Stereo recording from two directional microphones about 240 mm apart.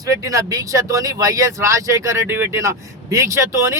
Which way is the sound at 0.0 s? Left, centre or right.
Centre.